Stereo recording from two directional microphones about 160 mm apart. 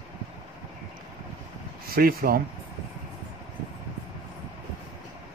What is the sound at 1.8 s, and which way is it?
Speech, 65° right (ahead or behind).